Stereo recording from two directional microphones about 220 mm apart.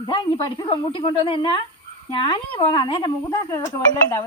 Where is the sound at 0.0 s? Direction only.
20° left (ahead or behind).